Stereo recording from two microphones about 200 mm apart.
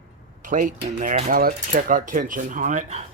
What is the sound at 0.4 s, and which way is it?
Speech, 40° right (ahead or behind).